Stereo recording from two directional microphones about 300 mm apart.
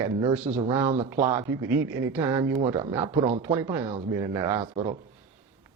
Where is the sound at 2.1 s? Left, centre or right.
Centre.